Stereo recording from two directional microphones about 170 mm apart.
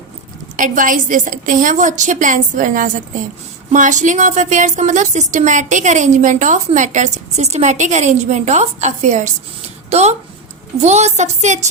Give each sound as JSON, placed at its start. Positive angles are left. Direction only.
{"t": 0.5, "sound": "speech", "side_deg": -50}